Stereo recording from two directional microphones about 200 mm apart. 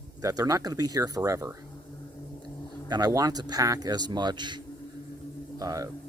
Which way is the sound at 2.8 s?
20° right (ahead or behind).